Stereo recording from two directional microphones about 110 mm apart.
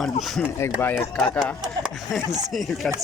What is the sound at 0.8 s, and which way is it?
Speech, 20° left (ahead or behind).